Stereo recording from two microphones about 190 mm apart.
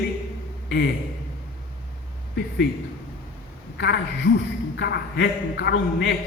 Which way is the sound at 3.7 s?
65° left (ahead or behind).